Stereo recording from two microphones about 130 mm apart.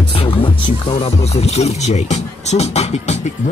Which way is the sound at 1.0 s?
55° left (ahead or behind).